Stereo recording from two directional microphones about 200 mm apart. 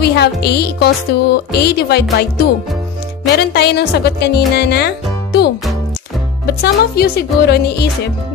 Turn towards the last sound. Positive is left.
turn(degrees=50)  # may be behind; listen again after turning